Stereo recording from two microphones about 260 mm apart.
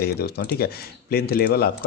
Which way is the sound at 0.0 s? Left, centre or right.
Left.